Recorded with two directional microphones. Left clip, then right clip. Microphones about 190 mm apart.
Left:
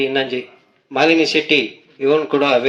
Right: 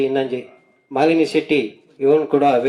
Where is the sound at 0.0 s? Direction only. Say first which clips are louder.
Left 1 dB; 45° right (ahead or behind).